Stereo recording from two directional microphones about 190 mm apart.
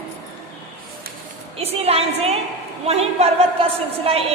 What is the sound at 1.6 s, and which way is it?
A woman's voice, 30° right (ahead or behind).